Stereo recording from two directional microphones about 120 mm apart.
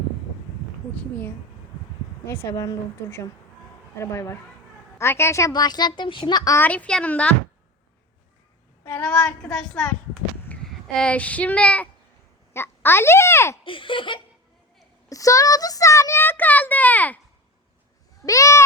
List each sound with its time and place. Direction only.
2.2 s a woman's voice: 20° left (ahead or behind)
6.6 s speech: 10° left (ahead or behind)
8.8 s a child's voice: 15° left (ahead or behind)
13.7 s speech: 45° left (ahead or behind)
15.1 s a child's voice: 30° left (ahead or behind)
18.3 s speech: 25° left (ahead or behind)